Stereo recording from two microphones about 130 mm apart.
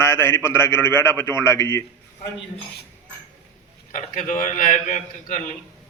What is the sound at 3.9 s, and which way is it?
A man's voice, 75° left (ahead or behind).